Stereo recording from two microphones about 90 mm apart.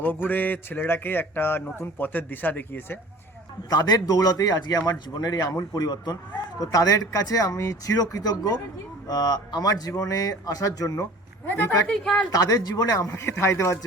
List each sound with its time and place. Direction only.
0.0 s speech: 20° left (ahead or behind)
3.7 s speech: 50° left (ahead or behind)
11.4 s speech: 20° left (ahead or behind)
11.9 s a woman's voice: 5° left (ahead or behind)
12.3 s speech: 45° left (ahead or behind)
13.1 s speech: 30° left (ahead or behind)